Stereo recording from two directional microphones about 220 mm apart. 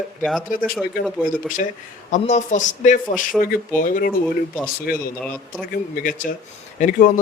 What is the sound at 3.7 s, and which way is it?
A man's voice, 40° left (ahead or behind).